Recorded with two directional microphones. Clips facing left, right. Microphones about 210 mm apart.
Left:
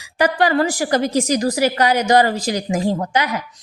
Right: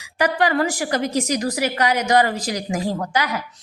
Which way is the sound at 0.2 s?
30° left (ahead or behind).